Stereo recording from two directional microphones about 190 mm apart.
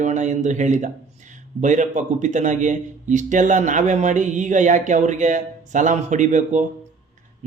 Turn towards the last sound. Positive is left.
turn(degrees=-40)  # may be behind; listen again after turning